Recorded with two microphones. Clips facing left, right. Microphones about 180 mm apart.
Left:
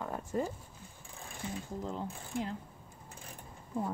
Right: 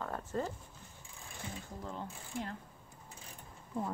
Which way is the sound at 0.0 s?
15° left (ahead or behind).